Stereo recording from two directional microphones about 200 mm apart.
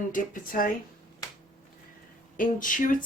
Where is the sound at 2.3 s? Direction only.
40° left (ahead or behind).